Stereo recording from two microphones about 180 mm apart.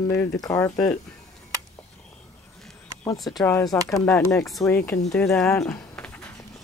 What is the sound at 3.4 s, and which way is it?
Speech, 15° left (ahead or behind).